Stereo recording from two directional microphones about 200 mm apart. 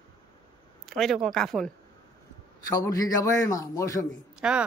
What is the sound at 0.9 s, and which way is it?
Speech, centre (ahead or behind).